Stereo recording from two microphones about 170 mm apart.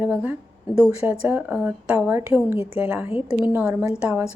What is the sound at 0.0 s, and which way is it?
A woman's voice, 10° right (ahead or behind).